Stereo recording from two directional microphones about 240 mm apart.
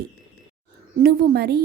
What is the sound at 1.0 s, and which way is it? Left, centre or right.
Speech, right.